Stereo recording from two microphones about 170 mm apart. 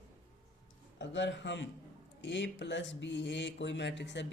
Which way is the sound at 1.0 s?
90° left.